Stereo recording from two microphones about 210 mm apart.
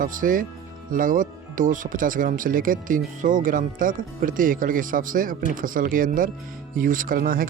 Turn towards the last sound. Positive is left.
turn(degrees=-40)  # may be behind; listen again after turning